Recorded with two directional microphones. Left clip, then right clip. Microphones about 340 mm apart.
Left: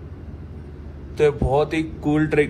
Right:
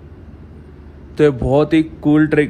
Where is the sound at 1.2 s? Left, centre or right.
Right.